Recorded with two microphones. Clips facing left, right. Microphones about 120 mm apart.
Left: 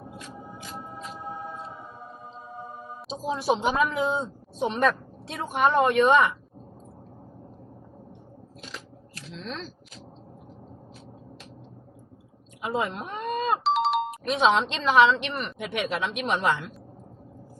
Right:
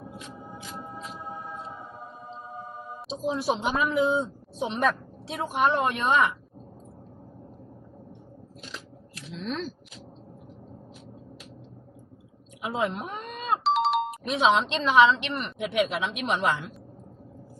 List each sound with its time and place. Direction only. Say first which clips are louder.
0.6 s music: left 1 dB; centre (ahead or behind)
3.2 s a woman's voice: left 2 dB; centre (ahead or behind)
8.6 s a sound: left 1 dB; centre (ahead or behind)
12.7 s speech: even; centre (ahead or behind)